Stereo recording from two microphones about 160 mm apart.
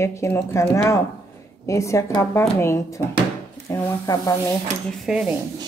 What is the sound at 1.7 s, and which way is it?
Speech, 20° left (ahead or behind).